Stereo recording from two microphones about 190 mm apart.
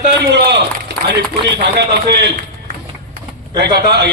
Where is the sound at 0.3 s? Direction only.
60° right (ahead or behind).